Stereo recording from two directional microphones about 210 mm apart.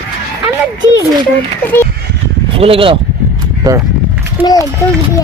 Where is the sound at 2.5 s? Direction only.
25° right (ahead or behind).